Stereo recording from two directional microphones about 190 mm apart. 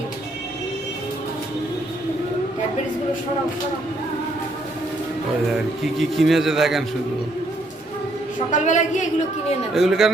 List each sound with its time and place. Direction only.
5.5 s a man's voice: centre (ahead or behind)
8.4 s a woman's voice: 40° left (ahead or behind)
9.7 s a man's voice: centre (ahead or behind)